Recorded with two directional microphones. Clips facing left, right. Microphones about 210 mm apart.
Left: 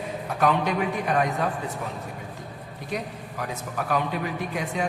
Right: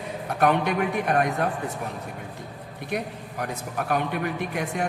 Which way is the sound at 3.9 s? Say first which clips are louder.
Right 1 dB; 55° right (ahead or behind).